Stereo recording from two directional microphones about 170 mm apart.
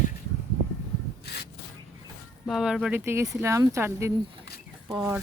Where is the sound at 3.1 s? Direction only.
15° right (ahead or behind).